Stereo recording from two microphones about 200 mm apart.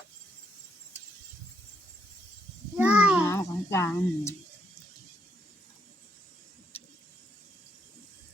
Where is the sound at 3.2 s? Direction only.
15° left (ahead or behind).